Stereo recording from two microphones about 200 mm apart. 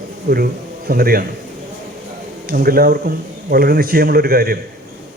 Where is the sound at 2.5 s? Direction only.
50° right (ahead or behind).